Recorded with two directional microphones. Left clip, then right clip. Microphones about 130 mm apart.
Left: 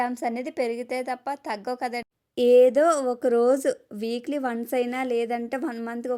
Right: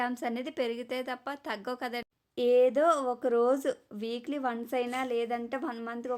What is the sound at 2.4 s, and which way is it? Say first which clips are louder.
Speech: left 7 dB; 50° left (ahead or behind).